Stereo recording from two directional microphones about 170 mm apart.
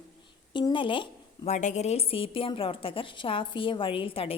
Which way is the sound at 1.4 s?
45° left (ahead or behind).